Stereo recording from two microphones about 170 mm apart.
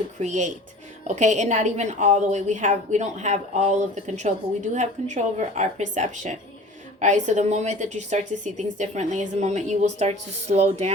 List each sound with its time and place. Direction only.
0.2 s a woman's voice: 45° right (ahead or behind)